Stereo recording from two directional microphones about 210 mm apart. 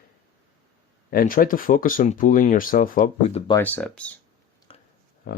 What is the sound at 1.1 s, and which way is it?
Speech, 40° left (ahead or behind).